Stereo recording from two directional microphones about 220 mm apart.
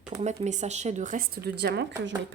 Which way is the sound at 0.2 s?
30° right (ahead or behind).